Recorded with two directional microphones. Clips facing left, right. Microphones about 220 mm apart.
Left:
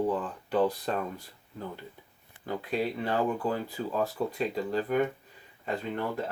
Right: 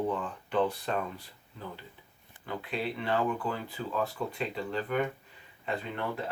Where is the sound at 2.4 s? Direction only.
40° left (ahead or behind).